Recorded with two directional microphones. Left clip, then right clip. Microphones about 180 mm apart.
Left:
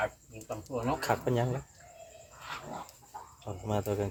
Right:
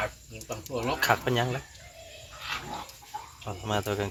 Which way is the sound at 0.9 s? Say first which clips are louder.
Right 7 dB; 5° left (ahead or behind).